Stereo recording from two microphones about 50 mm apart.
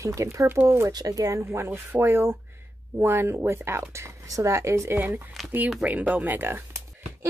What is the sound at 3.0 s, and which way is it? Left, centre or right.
Speech, right.